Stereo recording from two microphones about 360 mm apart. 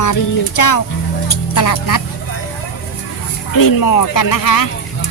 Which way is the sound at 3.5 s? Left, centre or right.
Left.